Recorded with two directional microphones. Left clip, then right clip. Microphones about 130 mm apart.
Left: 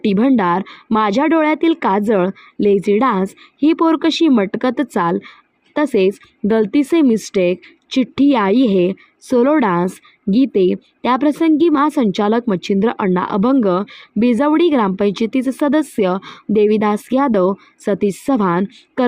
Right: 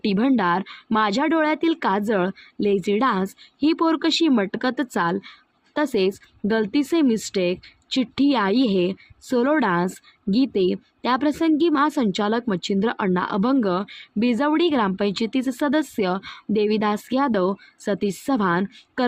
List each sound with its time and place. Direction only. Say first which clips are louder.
0.0 s speech: left 6 dB; 45° left (ahead or behind)